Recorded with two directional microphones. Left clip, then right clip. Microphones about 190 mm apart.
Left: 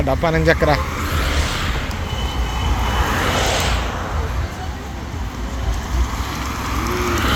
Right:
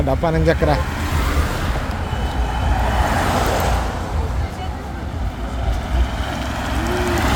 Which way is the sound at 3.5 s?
40° right (ahead or behind).